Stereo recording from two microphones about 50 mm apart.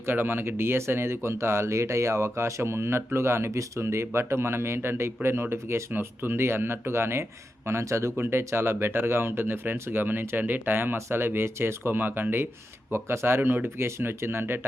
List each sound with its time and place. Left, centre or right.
0.0 s speech: right
7.7 s speech: right
8.2 s speech: right